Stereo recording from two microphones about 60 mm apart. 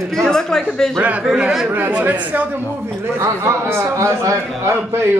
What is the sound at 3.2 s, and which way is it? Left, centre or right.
Speech, right.